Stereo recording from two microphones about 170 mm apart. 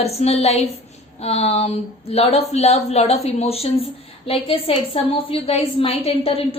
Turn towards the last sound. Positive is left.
turn(degrees=35)  # may be behind; listen again after turning